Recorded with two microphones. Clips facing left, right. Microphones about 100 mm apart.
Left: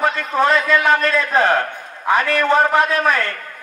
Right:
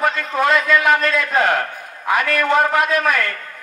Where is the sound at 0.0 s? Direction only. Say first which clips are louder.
Left 1 dB; 30° left (ahead or behind).